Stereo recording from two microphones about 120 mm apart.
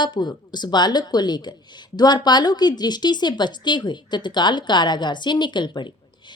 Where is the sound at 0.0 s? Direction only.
40° left (ahead or behind).